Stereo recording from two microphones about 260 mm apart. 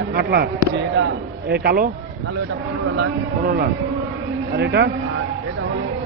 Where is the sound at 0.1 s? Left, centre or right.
Right.